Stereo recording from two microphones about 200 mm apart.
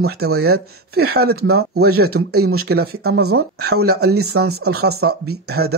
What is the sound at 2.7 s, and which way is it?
Speech, 50° right (ahead or behind).